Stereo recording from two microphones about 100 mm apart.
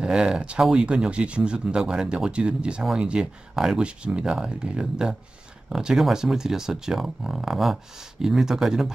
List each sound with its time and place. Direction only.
0.0 s speech: 10° right (ahead or behind)